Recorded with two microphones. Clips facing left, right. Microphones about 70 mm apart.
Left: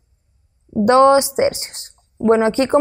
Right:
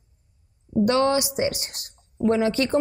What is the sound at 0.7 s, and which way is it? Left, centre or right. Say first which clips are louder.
A woman's voice: left 9 dB; left.